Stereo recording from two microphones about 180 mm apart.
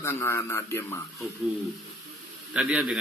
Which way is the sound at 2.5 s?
5° right (ahead or behind).